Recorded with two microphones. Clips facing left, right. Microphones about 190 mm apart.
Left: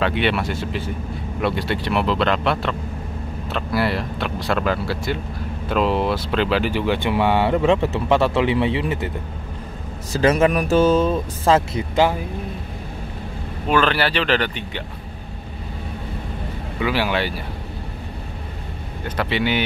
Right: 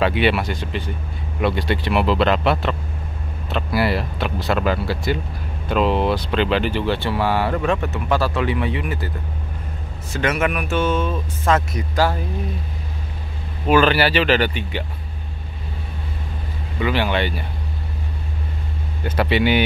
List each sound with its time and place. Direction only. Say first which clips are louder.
0.0 s speech: right 2 dB; 5° right (ahead or behind); by 9.1 s 25° left (ahead or behind)
10.1 s speech: left 5 dB; 35° left (ahead or behind)
13.7 s speech: right 3 dB; 5° right (ahead or behind)
16.8 s speech: right 1 dB; 5° left (ahead or behind)
19.0 s speech: right 3 dB; 10° right (ahead or behind)